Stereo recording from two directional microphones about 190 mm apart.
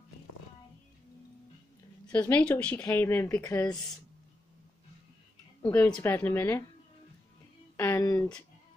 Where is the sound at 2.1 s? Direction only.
10° left (ahead or behind).